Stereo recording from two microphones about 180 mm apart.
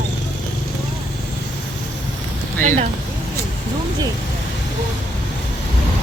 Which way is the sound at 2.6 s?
45° right (ahead or behind).